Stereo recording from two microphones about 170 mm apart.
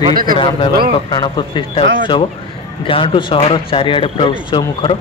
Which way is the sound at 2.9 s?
30° left (ahead or behind).